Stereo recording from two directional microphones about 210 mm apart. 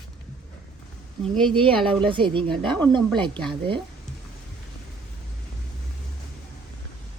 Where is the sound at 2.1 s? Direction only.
25° right (ahead or behind).